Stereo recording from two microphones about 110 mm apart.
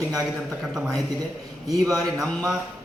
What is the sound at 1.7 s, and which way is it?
Speech, 35° right (ahead or behind).